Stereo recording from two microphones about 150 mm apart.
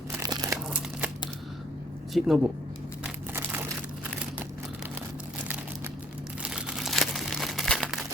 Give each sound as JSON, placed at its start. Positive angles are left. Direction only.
{"t": 0.1, "sound": "crumpling", "side_deg": -25}
{"t": 2.1, "sound": "speech", "side_deg": -5}
{"t": 3.0, "sound": "crumpling", "side_deg": -15}
{"t": 6.4, "sound": "crumpling", "side_deg": -5}